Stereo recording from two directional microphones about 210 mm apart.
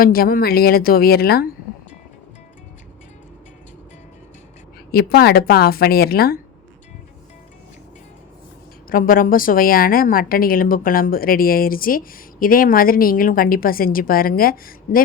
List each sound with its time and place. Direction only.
0.0 s a woman's voice: 45° left (ahead or behind)
4.9 s a woman's voice: 45° left (ahead or behind)
8.9 s a woman's voice: 40° left (ahead or behind)